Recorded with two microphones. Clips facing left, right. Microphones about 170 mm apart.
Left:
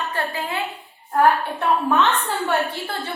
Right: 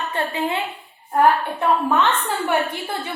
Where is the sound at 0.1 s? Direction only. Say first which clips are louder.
Right 3 dB; 20° right (ahead or behind).